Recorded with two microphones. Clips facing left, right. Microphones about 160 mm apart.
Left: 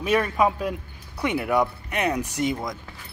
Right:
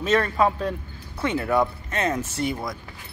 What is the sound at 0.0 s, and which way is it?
Speech, 10° left (ahead or behind).